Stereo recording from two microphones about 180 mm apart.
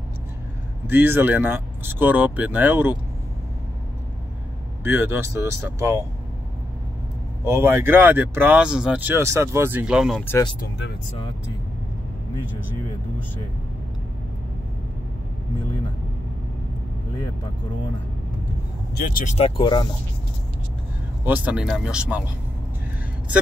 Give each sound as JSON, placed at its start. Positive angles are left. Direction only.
{"t": 0.8, "sound": "speech", "side_deg": -10}
{"t": 4.8, "sound": "speech", "side_deg": -10}
{"t": 7.4, "sound": "speech", "side_deg": -15}
{"t": 10.2, "sound": "speech", "side_deg": 15}
{"t": 18.9, "sound": "speech", "side_deg": 50}
{"t": 19.3, "sound": "speech", "side_deg": 30}
{"t": 21.3, "sound": "speech", "side_deg": -10}